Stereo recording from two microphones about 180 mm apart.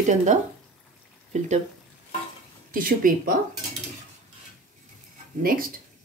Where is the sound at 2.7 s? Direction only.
50° right (ahead or behind).